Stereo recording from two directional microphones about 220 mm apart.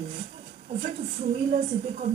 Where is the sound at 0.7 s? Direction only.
35° right (ahead or behind).